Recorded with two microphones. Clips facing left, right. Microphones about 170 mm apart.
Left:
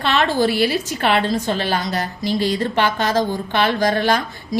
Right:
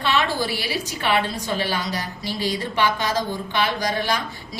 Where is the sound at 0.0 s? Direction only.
55° left (ahead or behind).